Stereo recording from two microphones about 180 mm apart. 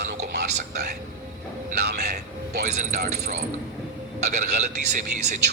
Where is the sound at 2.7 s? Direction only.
40° right (ahead or behind).